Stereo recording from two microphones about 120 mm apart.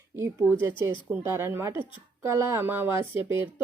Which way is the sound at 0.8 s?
20° right (ahead or behind).